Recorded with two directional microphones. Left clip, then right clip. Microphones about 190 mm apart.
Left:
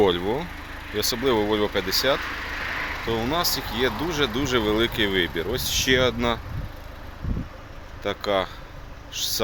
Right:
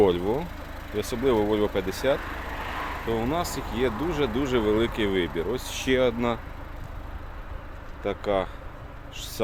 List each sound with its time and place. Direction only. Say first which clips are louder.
0.0 s speech: left 1 dB; 5° left (ahead or behind)
2.1 s vehicle: left 4 dB; 30° right (ahead or behind)
3.1 s speech: left 3 dB; 5° left (ahead or behind)
8.0 s speech: left 2 dB; 5° left (ahead or behind)